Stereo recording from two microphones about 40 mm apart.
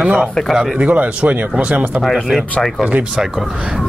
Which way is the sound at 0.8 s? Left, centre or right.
Right.